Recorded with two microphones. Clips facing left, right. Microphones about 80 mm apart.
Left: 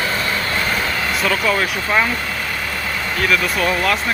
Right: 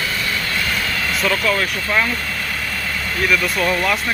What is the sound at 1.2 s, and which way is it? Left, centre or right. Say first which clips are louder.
Speech: even; centre.